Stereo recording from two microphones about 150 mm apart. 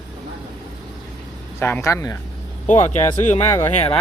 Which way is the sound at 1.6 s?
15° left (ahead or behind).